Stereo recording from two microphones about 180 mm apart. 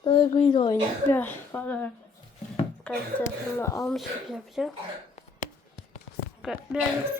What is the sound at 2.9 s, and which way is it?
Speech, 5° left (ahead or behind).